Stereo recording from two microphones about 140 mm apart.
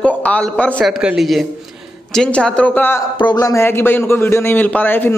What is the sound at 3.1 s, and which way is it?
A man's voice, 30° left (ahead or behind).